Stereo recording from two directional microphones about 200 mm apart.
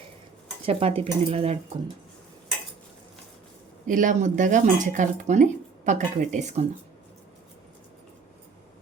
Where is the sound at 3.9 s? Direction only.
40° right (ahead or behind).